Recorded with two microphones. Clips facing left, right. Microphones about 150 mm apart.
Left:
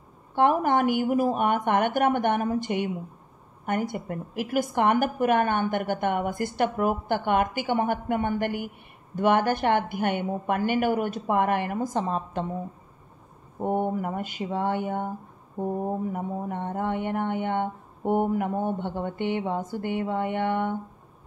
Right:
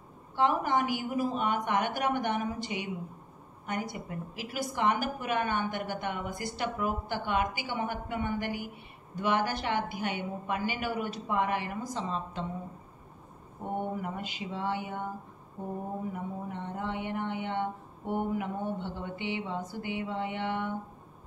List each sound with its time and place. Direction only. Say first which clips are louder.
0.4 s a woman's voice: left 6 dB; 55° left (ahead or behind)
13.6 s a woman's voice: left 8 dB; 50° left (ahead or behind)